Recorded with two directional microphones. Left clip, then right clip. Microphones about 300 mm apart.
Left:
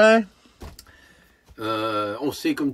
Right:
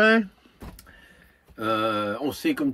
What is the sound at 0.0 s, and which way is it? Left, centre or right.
Speech, centre.